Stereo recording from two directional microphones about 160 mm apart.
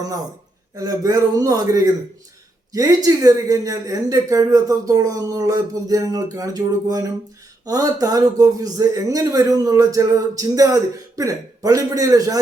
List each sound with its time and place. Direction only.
0.8 s a man's voice: 20° right (ahead or behind)